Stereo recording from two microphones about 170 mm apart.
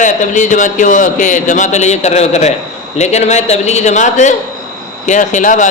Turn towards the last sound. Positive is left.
turn(degrees=45)  # may be behind; listen again after turning